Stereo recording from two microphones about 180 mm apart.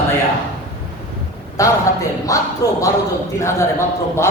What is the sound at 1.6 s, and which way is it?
A man's voice, 20° left (ahead or behind).